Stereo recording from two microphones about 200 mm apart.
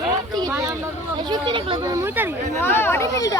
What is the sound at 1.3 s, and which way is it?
Speech, 25° right (ahead or behind).